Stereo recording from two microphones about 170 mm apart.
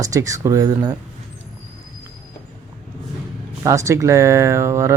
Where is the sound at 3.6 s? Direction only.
20° right (ahead or behind).